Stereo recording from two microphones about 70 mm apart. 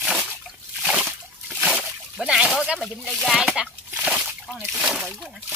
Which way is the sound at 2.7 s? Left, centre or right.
Centre.